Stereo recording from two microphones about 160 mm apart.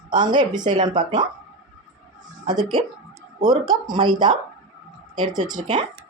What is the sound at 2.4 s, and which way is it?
Speech, 25° right (ahead or behind).